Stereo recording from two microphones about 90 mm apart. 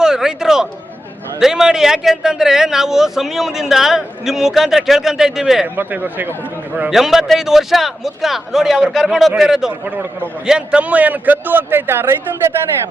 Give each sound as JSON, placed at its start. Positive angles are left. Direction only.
{"t": 0.0, "sound": "a sound", "side_deg": -5}
{"t": 1.4, "sound": "a man's voice", "side_deg": -5}
{"t": 5.6, "sound": "a man's voice", "side_deg": -20}
{"t": 6.9, "sound": "a man's voice", "side_deg": -5}
{"t": 9.8, "sound": "a man's voice", "side_deg": -20}
{"t": 10.4, "sound": "a man's voice", "side_deg": -10}